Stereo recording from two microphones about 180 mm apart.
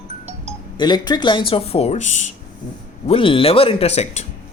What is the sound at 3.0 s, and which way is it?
Speech, 30° left (ahead or behind).